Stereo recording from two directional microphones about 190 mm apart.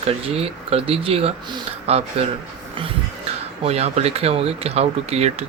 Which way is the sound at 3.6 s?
35° right (ahead or behind).